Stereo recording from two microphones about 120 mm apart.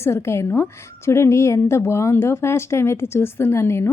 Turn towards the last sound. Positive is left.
turn(degrees=20)  # may be behind; listen again after turning